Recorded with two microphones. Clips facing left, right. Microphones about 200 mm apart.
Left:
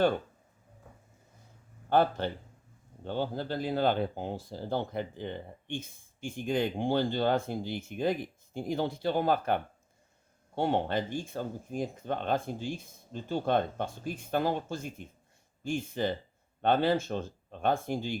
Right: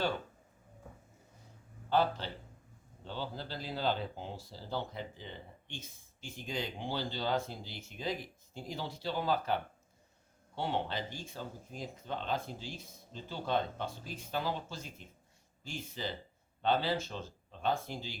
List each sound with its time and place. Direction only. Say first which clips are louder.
1.9 s speech: left 5 dB; 55° left (ahead or behind)